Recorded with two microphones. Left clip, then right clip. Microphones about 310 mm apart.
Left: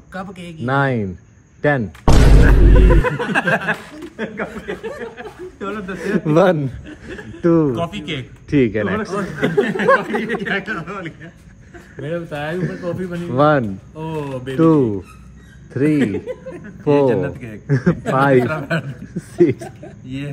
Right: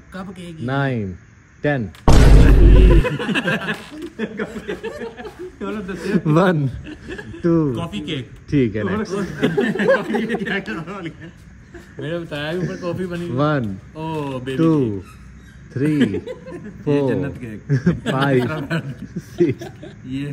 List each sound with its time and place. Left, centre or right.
0.1 s speech: centre
6.2 s speech: centre
7.2 s speech: centre
12.6 s speech: centre
12.9 s speech: centre
13.4 s speech: centre
13.9 s speech: centre
15.7 s speech: centre